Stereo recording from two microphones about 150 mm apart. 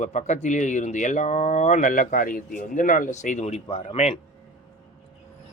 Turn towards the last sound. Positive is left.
turn(degrees=45)  # may be behind; listen again after turning